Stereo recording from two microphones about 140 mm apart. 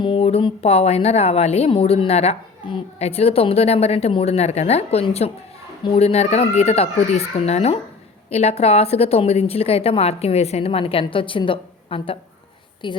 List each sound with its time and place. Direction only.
0.0 s a woman's voice: 40° left (ahead or behind)